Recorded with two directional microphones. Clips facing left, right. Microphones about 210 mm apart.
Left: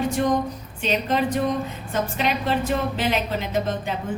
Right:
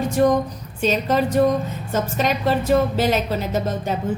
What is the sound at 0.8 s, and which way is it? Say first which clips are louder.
A woman's voice: right 3 dB; 40° right (ahead or behind).